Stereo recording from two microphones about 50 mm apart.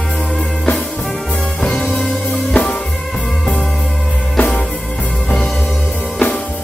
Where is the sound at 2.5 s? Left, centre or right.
Left.